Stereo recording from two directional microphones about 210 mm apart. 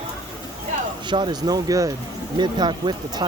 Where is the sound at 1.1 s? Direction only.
20° right (ahead or behind).